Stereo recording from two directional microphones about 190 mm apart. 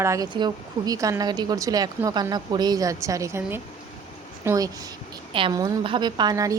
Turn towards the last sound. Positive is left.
turn(degrees=-20)  # may be behind; listen again after turning